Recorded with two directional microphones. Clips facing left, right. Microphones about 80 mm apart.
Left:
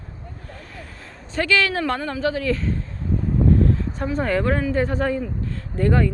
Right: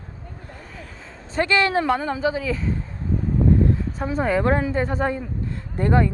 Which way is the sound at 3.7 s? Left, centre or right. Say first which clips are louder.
Even; centre.